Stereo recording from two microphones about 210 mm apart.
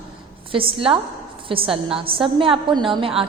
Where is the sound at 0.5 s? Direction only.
25° right (ahead or behind).